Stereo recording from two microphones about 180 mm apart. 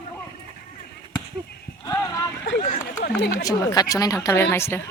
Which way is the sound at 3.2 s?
65° left (ahead or behind).